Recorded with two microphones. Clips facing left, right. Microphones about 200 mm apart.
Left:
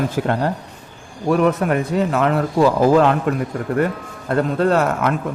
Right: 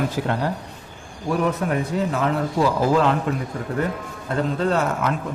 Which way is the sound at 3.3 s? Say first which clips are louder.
Left 5 dB; 55° left (ahead or behind).